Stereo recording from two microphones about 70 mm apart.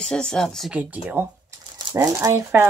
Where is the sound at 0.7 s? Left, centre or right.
Centre.